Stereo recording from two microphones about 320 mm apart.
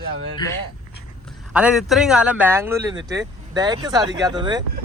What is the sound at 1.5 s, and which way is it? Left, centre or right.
Speech, centre.